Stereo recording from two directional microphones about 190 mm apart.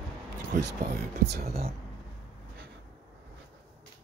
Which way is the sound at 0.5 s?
60° right (ahead or behind).